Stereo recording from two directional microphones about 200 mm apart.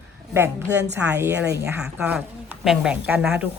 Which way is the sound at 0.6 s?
60° right (ahead or behind).